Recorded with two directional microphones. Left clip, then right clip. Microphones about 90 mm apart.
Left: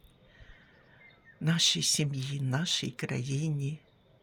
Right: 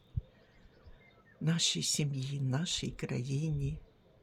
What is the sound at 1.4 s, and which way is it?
Speech, 20° left (ahead or behind).